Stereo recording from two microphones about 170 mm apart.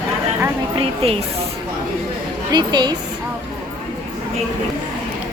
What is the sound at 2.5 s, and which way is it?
Speech, 25° right (ahead or behind).